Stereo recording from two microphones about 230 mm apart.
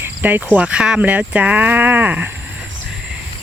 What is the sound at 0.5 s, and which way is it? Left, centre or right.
Speech, centre.